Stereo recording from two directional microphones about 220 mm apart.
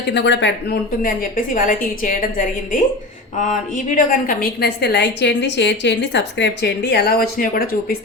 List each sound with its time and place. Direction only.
0.1 s a woman's voice: 50° left (ahead or behind)
3.4 s a woman's voice: 35° left (ahead or behind)